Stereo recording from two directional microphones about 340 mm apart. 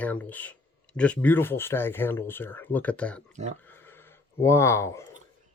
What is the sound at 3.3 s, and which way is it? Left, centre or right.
Speech, centre.